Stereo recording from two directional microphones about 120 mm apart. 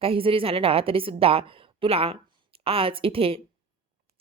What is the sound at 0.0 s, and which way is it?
A woman's voice, 50° right (ahead or behind).